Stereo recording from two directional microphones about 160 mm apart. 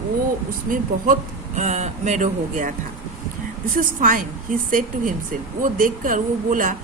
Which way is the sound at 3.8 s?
55° right (ahead or behind).